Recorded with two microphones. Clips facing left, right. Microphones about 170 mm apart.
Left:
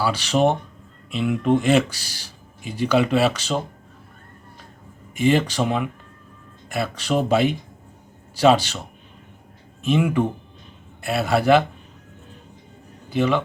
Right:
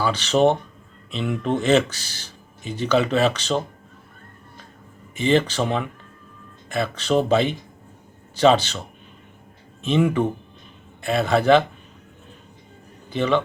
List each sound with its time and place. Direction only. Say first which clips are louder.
0.0 s speech: right 1 dB; 10° left (ahead or behind)
5.1 s speech: even; 10° left (ahead or behind)
9.8 s speech: even; 5° left (ahead or behind)
13.1 s speech: even; 5° left (ahead or behind)